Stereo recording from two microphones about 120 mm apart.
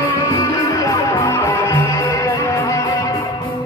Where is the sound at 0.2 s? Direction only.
25° left (ahead or behind).